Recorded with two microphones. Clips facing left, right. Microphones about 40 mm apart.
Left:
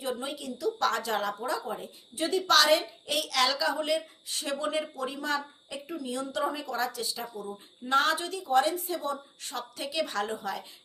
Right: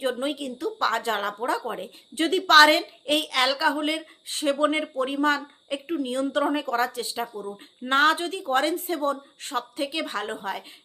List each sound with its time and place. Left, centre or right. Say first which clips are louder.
0.0 s a woman's voice: right 7 dB; right